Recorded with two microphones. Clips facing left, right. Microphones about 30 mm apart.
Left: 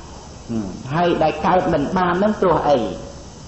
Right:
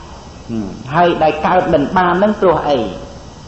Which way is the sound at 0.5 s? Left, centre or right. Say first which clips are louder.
Right 6 dB; right.